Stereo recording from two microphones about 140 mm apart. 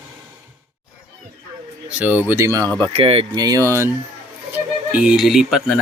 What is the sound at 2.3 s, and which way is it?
Speech, 20° right (ahead or behind).